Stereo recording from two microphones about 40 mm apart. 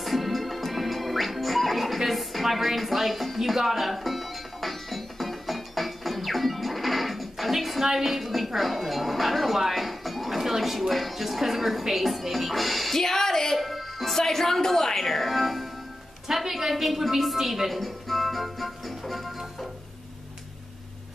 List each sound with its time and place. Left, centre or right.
0.0 s music: centre
13.6 s speech: centre
16.3 s music: centre